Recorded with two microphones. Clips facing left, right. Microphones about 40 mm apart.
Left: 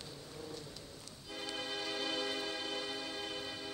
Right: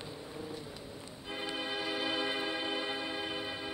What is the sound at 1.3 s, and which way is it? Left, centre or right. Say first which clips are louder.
Music: right 4 dB; right.